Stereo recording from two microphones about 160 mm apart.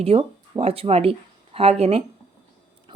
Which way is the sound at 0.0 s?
40° right (ahead or behind).